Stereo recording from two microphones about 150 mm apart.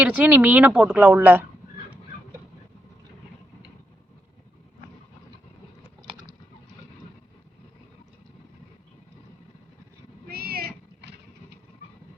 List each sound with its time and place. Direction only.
0.0 s speech: 10° right (ahead or behind)
6.1 s typing: 30° right (ahead or behind)
10.2 s cat: 90° right